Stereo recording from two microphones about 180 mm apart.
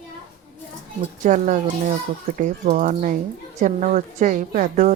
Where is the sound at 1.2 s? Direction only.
45° right (ahead or behind).